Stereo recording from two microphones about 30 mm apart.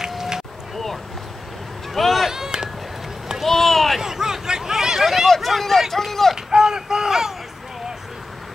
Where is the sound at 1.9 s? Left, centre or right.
Centre.